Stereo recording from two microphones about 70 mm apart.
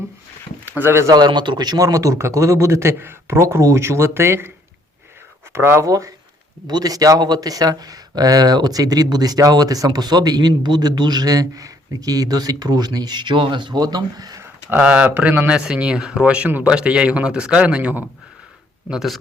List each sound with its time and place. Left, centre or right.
0.8 s speech: right
1.0 s a man's voice: right
5.5 s speech: right
5.8 s a man's voice: right
6.7 s speech: right
14.7 s speech: right
18.9 s speech: centre